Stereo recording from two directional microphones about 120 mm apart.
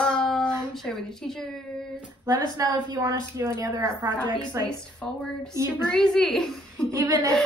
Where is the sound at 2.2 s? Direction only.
35° right (ahead or behind).